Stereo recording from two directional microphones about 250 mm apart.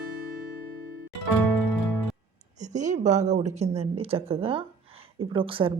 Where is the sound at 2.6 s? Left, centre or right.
Right.